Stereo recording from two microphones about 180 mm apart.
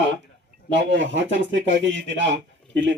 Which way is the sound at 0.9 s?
90° right.